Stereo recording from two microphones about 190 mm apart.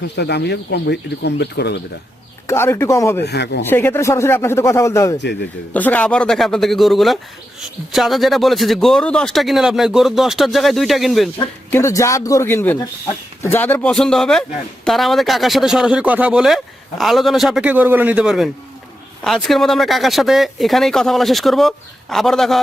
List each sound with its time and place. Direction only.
0.2 s speech: 60° left (ahead or behind)
2.5 s speech: 15° left (ahead or behind)
3.2 s speech: 60° left (ahead or behind)
3.6 s speech: 10° left (ahead or behind)
11.7 s speech: 15° left (ahead or behind)